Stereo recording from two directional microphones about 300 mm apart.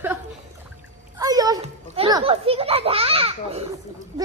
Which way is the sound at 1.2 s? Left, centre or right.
Centre.